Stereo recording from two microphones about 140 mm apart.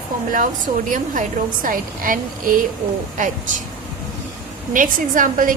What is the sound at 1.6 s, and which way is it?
Speech, 80° right.